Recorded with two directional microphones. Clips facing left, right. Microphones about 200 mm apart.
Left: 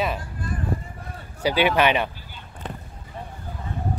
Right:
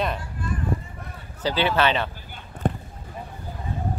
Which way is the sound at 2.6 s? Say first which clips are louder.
Right 10 dB; 50° right (ahead or behind).